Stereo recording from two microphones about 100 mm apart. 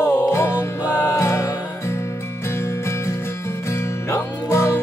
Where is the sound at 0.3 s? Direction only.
25° left (ahead or behind).